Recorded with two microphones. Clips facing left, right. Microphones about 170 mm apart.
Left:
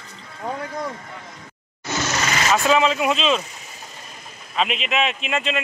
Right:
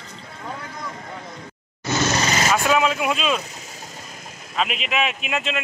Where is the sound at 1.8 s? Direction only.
35° right (ahead or behind).